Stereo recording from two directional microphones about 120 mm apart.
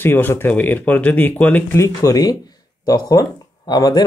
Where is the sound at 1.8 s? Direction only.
30° left (ahead or behind).